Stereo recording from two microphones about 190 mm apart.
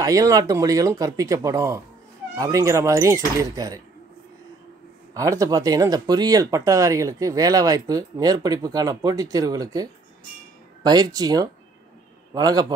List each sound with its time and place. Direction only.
0.0 s speech: 15° right (ahead or behind)
5.1 s speech: 15° right (ahead or behind)